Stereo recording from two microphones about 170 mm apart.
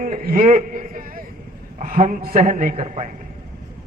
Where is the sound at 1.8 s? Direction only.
50° right (ahead or behind).